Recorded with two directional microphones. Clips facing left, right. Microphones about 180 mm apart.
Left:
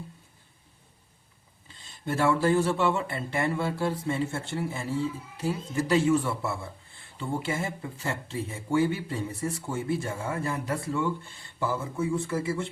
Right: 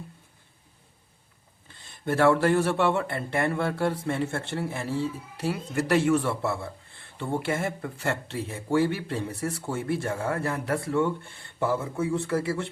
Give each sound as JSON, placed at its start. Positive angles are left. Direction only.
{"t": 1.6, "sound": "speech", "side_deg": -60}